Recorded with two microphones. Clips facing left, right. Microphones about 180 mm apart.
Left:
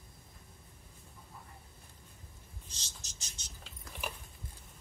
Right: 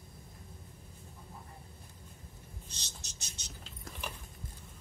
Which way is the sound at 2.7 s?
65° right (ahead or behind).